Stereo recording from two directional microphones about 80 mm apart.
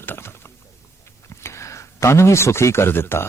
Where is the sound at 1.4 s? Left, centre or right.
Left.